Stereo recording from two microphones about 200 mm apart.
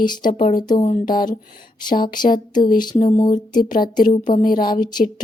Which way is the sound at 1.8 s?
20° left (ahead or behind).